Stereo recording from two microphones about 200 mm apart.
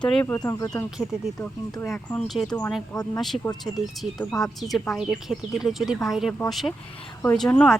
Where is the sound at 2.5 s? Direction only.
15° left (ahead or behind).